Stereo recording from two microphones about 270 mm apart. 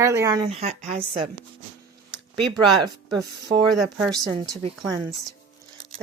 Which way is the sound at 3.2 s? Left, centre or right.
Centre.